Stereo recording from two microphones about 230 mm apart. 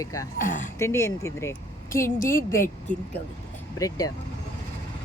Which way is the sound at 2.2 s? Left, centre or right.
Left.